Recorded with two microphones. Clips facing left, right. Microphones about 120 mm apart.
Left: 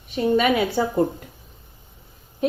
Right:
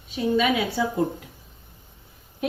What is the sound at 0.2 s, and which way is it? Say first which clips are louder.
Speech: left 3 dB; 55° left (ahead or behind).